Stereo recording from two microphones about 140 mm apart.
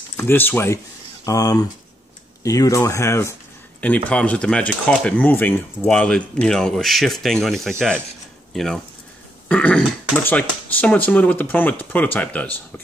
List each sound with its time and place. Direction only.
0.2 s speech: 15° left (ahead or behind)
1.2 s speech: 25° left (ahead or behind); by 12.8 s 10° left (ahead or behind)